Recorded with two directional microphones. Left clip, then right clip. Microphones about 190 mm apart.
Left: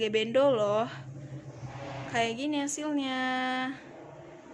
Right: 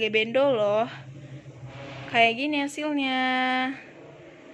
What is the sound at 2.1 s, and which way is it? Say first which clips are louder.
Speech: right 8 dB; 15° right (ahead or behind).